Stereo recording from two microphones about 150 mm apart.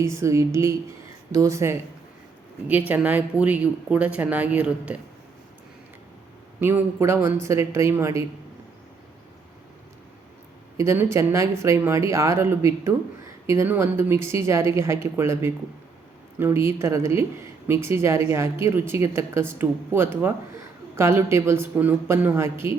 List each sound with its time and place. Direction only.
0.0 s speech: 20° right (ahead or behind)
6.6 s speech: 15° right (ahead or behind)
10.8 s speech: 20° right (ahead or behind)